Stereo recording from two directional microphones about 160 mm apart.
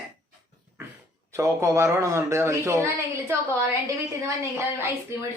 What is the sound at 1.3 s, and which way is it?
Speech, 20° right (ahead or behind).